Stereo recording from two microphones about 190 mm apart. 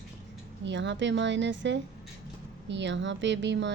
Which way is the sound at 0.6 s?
70° right (ahead or behind).